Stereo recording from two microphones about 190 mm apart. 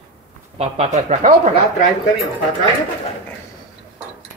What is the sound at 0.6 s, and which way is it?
Speech, 35° right (ahead or behind).